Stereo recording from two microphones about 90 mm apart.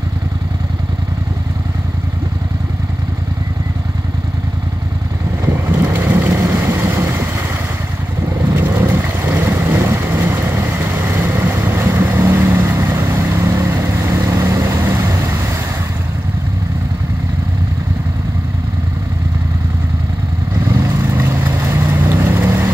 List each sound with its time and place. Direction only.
5.4 s vehicle: 30° right (ahead or behind)
8.5 s vehicle: 25° right (ahead or behind)
20.7 s vehicle: 40° right (ahead or behind)
21.5 s vehicle: 25° right (ahead or behind)